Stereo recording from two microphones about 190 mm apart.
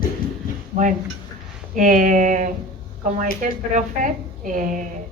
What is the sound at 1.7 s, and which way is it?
A woman's voice, 40° right (ahead or behind).